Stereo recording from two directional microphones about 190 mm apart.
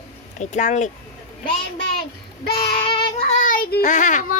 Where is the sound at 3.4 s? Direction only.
50° left (ahead or behind).